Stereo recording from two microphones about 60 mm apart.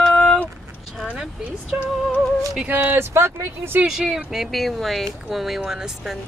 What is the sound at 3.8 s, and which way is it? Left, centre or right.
Speech, centre.